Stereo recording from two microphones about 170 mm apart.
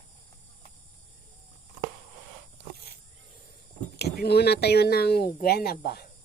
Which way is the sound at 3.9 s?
70° left (ahead or behind).